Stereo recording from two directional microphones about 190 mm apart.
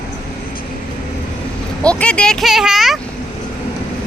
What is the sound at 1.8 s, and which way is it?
Speech, 5° left (ahead or behind).